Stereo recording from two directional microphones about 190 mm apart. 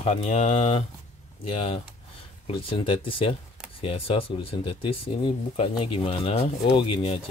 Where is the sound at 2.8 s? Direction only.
25° left (ahead or behind).